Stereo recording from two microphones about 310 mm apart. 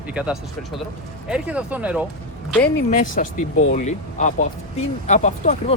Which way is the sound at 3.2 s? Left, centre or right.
Left.